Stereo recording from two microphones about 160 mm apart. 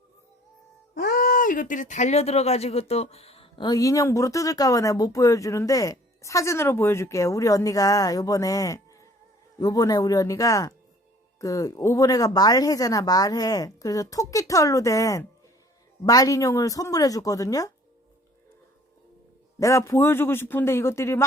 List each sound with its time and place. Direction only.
0.9 s speech: 65° left (ahead or behind); by 17.7 s 20° left (ahead or behind)
19.5 s a man's voice: 20° left (ahead or behind)